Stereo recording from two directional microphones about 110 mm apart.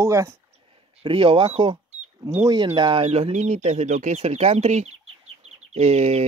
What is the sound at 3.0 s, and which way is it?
Speech, 70° right (ahead or behind).